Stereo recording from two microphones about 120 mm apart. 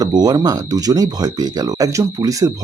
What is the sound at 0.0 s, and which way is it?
Speech, 35° right (ahead or behind).